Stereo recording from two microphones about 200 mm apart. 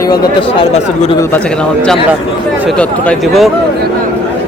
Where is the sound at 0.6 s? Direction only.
25° left (ahead or behind).